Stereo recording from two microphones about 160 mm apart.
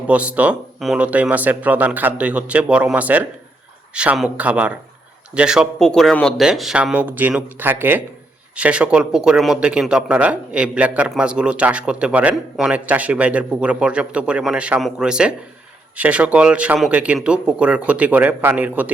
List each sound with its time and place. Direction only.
0.1 s speech: 10° right (ahead or behind)